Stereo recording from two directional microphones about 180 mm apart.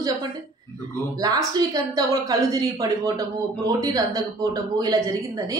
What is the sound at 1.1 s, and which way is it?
A woman's voice, 20° right (ahead or behind).